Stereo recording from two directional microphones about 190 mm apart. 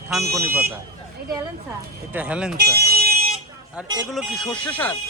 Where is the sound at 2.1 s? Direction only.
5° right (ahead or behind).